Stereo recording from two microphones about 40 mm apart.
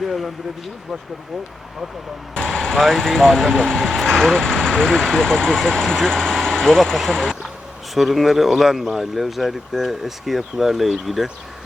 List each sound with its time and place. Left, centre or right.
0.0 s speech: centre
2.3 s speech: centre
7.9 s speech: centre